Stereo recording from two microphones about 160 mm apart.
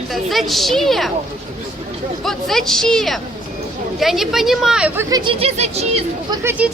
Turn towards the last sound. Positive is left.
turn(degrees=-15)  # may be behind; listen again after turning